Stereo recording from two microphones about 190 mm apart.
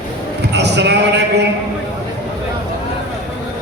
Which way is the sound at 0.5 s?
65° right (ahead or behind).